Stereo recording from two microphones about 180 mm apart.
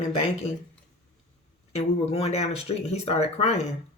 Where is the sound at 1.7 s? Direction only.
35° left (ahead or behind).